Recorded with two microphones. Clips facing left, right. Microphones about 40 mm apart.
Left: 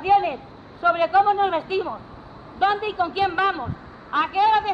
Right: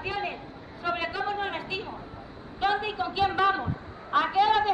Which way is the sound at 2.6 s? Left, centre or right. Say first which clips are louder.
Left 6 dB; centre.